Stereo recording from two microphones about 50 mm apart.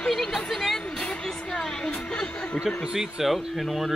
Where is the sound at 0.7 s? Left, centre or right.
Centre.